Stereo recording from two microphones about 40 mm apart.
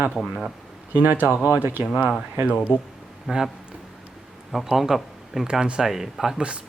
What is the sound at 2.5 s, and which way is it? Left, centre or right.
Speech, left.